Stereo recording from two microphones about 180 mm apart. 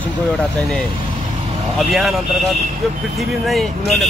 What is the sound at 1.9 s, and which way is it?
Speech, centre (ahead or behind).